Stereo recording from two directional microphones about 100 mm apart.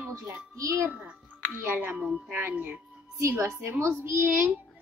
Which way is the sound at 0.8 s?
15° right (ahead or behind).